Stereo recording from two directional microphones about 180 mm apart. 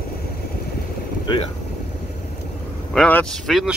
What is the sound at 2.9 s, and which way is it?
Speech, 5° left (ahead or behind).